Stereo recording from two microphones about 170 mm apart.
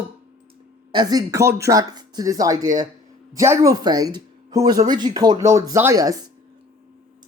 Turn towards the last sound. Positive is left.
turn(degrees=-20)  # may be behind; listen again after turning